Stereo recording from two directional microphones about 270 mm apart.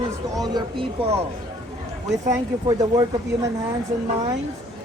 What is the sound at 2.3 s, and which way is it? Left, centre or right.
Speech, centre.